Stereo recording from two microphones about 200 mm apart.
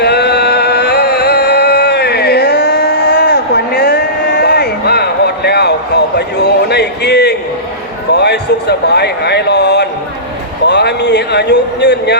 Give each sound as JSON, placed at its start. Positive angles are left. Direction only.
{"t": 0.0, "sound": "music", "side_deg": 55}
{"t": 6.1, "sound": "a sound", "side_deg": 55}
{"t": 10.7, "sound": "speech", "side_deg": 60}